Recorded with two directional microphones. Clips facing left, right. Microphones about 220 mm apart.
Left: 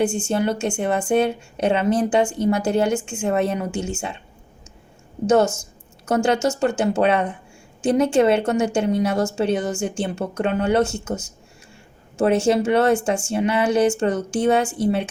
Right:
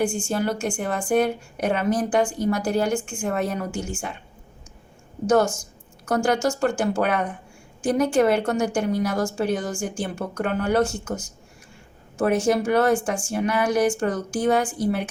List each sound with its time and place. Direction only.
0.0 s a woman's voice: 25° left (ahead or behind)
5.2 s a woman's voice: 25° left (ahead or behind)